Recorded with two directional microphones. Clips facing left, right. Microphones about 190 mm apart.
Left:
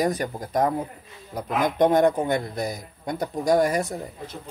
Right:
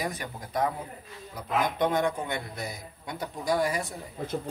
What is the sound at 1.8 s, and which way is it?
Speech, 45° left (ahead or behind).